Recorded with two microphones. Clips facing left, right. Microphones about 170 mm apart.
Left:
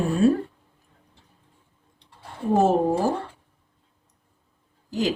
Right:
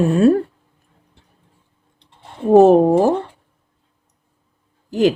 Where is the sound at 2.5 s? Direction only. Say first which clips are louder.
Right 10 dB; 70° right (ahead or behind).